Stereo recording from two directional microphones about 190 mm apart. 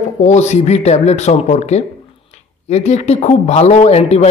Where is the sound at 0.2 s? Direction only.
35° left (ahead or behind).